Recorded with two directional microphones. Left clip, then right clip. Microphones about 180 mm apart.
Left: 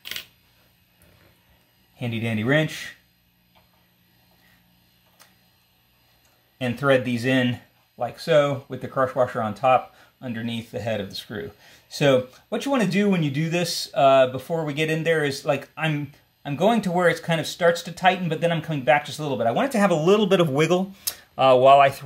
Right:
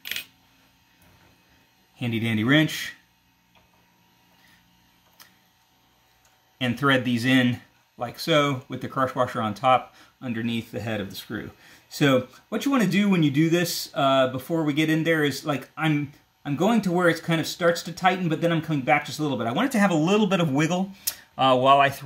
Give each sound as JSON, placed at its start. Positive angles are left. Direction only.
{"t": 2.0, "sound": "speech", "side_deg": 20}
{"t": 6.6, "sound": "speech", "side_deg": 15}